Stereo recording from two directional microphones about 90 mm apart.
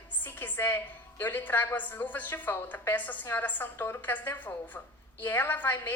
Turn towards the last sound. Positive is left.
turn(degrees=20)  # may be behind; listen again after turning